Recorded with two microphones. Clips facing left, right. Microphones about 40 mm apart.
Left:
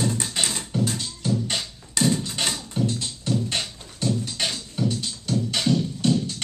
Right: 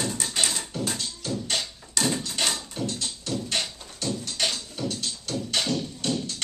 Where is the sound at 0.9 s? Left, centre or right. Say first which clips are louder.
Left 4 dB; centre.